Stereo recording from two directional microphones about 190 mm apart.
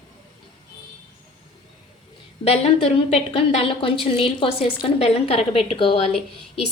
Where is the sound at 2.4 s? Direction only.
35° left (ahead or behind).